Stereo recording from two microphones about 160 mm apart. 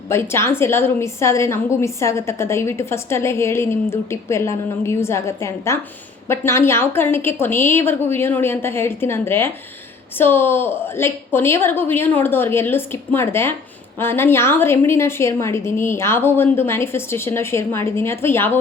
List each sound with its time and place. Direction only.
0.1 s a woman's voice: 15° left (ahead or behind)